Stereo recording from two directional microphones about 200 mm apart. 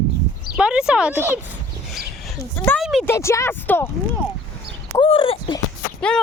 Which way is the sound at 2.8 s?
Centre (ahead or behind).